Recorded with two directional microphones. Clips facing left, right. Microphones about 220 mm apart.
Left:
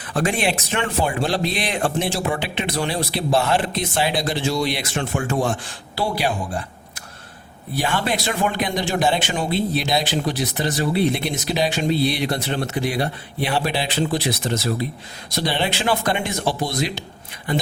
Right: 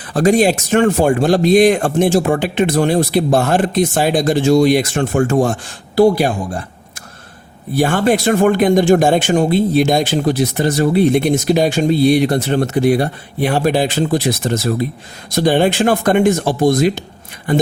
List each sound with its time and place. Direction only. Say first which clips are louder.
0.1 s speech: right 9 dB; 40° right (ahead or behind)
7.8 s speech: right 9 dB; 45° right (ahead or behind)